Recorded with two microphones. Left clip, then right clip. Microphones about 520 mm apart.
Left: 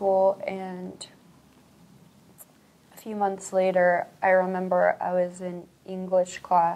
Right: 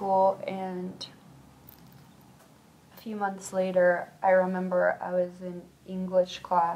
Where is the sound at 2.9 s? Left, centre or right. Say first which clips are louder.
Left 5 dB; centre.